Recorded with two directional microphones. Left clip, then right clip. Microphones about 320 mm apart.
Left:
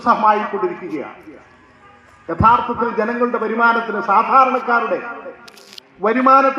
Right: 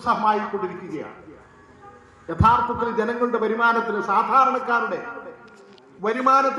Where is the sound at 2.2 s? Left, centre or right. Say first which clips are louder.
Left 5 dB; left.